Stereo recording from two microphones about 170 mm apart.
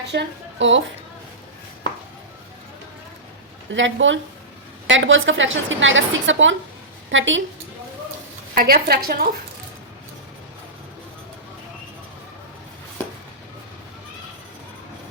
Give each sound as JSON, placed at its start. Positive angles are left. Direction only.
{"t": 0.1, "sound": "a woman's voice", "side_deg": -90}
{"t": 3.7, "sound": "a woman's voice", "side_deg": -90}
{"t": 8.5, "sound": "speech", "side_deg": -65}